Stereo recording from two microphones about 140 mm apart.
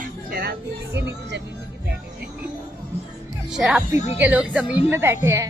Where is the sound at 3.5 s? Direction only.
5° right (ahead or behind); by 5.4 s 20° right (ahead or behind).